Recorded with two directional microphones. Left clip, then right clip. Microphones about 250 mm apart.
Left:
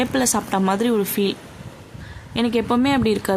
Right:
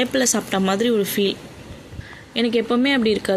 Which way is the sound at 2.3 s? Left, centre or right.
Centre.